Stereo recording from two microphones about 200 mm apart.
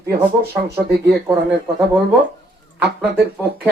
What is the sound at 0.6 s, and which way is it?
Speech, 55° right (ahead or behind).